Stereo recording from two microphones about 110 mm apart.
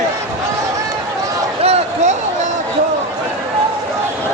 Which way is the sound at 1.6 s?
80° right.